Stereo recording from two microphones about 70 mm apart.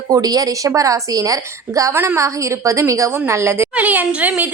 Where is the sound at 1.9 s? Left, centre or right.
Right.